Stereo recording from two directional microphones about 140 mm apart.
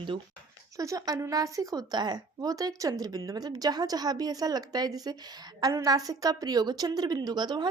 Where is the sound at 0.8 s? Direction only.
25° right (ahead or behind).